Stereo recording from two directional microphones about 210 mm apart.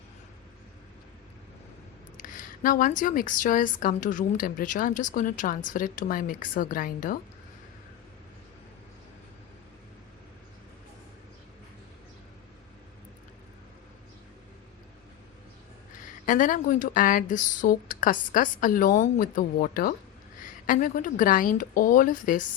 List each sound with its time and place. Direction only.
2.1 s a woman's voice: 40° left (ahead or behind)
16.2 s a woman's voice: 40° left (ahead or behind)